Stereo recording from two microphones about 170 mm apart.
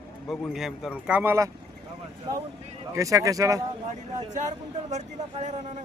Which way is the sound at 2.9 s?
20° right (ahead or behind).